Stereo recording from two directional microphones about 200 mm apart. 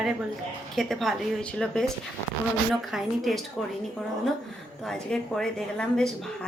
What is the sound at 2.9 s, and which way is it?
Speech, centre (ahead or behind).